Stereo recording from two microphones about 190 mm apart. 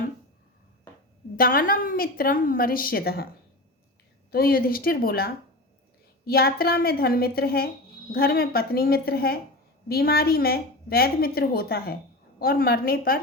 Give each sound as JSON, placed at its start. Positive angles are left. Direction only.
{"t": 1.4, "sound": "a woman's voice", "side_deg": 50}
{"t": 4.3, "sound": "a woman's voice", "side_deg": 50}